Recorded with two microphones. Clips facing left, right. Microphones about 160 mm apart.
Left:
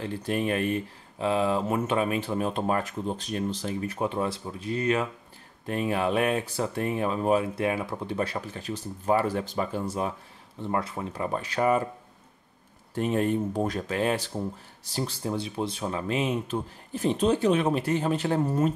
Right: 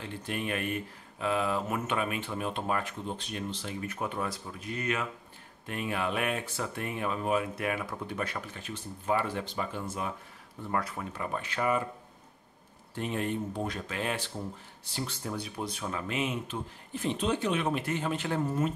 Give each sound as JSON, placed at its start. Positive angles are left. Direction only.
{"t": 0.0, "sound": "speech", "side_deg": 35}
{"t": 12.9, "sound": "speech", "side_deg": 45}
{"t": 15.2, "sound": "speech", "side_deg": 25}